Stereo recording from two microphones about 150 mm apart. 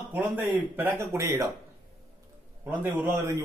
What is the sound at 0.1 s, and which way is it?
A man's voice, 15° right (ahead or behind).